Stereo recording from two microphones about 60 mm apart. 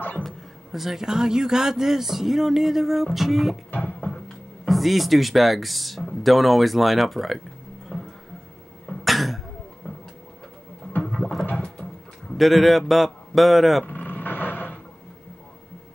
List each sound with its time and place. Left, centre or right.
0.2 s a man's voice: centre
4.6 s a man's voice: centre
7.9 s music: centre
9.0 s cough: centre
9.8 s a sound: left
11.1 s a sound: centre
12.4 s a man's voice: centre
13.8 s vehicle: left